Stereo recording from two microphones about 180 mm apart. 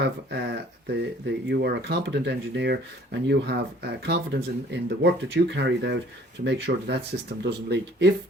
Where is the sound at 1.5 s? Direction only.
65° right (ahead or behind).